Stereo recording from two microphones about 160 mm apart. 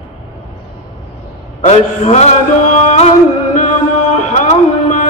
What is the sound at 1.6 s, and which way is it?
Mantra, 45° left (ahead or behind).